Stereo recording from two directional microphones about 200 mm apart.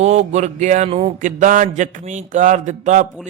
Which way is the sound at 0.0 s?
35° right (ahead or behind).